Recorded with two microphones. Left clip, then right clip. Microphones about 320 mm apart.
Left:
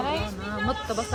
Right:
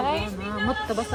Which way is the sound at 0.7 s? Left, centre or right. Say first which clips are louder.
Right 2 dB; centre.